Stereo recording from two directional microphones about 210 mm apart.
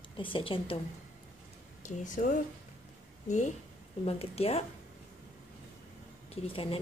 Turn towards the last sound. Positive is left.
turn(degrees=25)  # may be behind; listen again after turning